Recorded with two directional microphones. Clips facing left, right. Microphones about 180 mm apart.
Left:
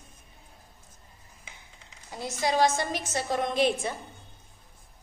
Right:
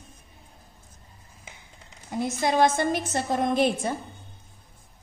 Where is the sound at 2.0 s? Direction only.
55° right (ahead or behind).